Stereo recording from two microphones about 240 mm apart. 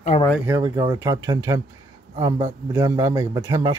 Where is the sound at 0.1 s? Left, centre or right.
Left.